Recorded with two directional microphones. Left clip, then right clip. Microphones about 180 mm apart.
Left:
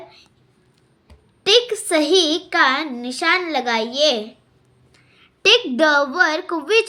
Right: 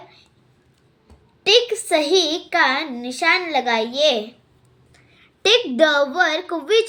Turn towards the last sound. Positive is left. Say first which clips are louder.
# even
turn(degrees=30)  # may be behind; listen again after turning